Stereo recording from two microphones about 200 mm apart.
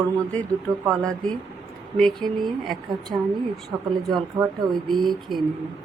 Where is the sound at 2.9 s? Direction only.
20° right (ahead or behind).